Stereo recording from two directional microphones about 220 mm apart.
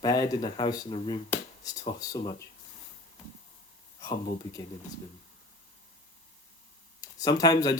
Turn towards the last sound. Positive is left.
turn(degrees=15)  # may be behind; listen again after turning